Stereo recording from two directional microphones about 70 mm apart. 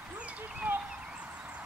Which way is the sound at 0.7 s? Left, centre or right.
Right.